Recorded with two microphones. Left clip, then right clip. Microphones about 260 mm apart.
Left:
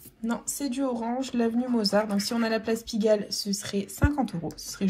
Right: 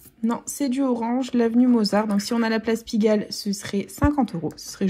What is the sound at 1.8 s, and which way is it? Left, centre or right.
Speech, right.